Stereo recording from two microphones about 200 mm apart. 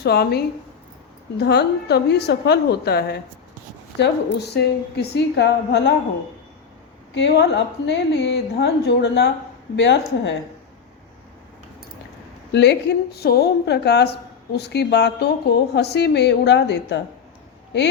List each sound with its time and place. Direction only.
0.0 s a woman's voice: 55° left (ahead or behind)
7.1 s a woman's voice: 60° left (ahead or behind)
12.5 s a woman's voice: 60° left (ahead or behind)